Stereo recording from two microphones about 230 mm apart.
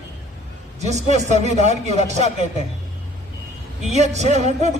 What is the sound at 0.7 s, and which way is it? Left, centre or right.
Speech, right.